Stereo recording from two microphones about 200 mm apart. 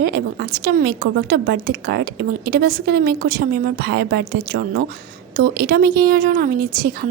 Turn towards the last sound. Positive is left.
turn(degrees=-50)  # may be behind; listen again after turning